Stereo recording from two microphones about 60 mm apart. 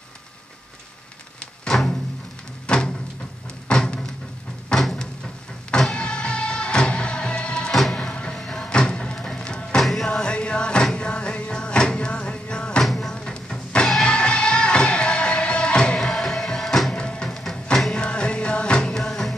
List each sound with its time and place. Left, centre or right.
1.6 s music: centre
2.6 s a sound: centre
5.7 s music: centre
7.7 s music: centre
8.1 s music: centre
9.8 s music: centre
10.0 s music: centre
12.8 s music: centre
13.1 s music: centre
16.9 s music: centre